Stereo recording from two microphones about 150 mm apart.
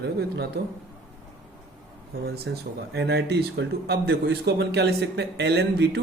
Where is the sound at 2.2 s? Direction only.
90° right.